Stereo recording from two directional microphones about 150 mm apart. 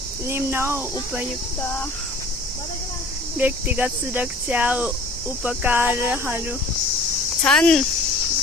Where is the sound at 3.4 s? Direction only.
10° right (ahead or behind).